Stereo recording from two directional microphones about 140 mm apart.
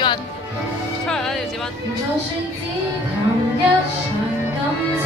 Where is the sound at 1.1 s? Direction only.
5° left (ahead or behind).